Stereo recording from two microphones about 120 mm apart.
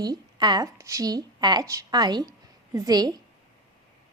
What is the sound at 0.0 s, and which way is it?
A woman's voice, 35° right (ahead or behind).